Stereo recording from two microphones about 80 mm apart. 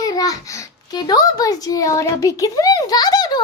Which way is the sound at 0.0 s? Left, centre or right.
Left.